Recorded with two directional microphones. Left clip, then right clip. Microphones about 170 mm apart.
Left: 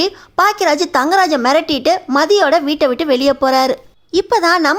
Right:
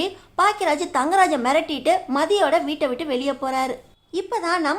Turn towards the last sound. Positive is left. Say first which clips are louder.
# left 10 dB
turn(degrees=40)  # may be behind; listen again after turning